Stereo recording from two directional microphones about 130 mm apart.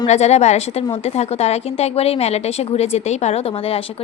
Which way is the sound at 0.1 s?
55° left (ahead or behind).